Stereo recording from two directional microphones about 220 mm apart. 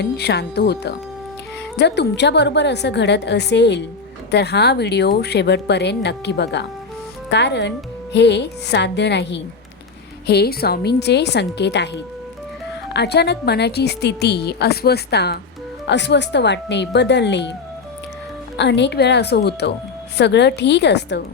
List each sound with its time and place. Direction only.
0.0 s a woman's voice: 50° left (ahead or behind)
12.9 s a woman's voice: 50° left (ahead or behind)
18.5 s a woman's voice: 50° left (ahead or behind)